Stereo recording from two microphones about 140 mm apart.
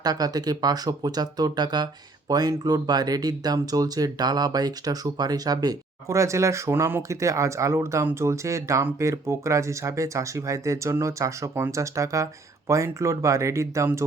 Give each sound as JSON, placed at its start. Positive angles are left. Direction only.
{"t": 0.0, "sound": "speech", "side_deg": -30}